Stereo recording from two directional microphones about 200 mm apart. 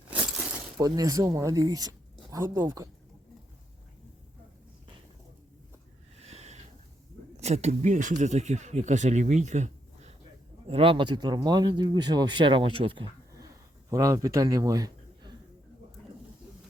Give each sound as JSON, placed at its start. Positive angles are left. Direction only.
{"t": 0.1, "sound": "a sound", "side_deg": -5}
{"t": 0.8, "sound": "speech", "side_deg": -20}
{"t": 6.1, "sound": "sniff", "side_deg": -30}
{"t": 7.3, "sound": "a man's voice", "side_deg": -30}